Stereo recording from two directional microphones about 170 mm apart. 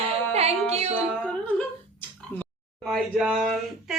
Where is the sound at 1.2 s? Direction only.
10° left (ahead or behind).